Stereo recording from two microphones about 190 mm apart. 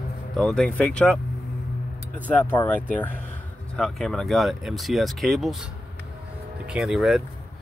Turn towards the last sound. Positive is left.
turn(degrees=0)  # may be behind; listen again after turning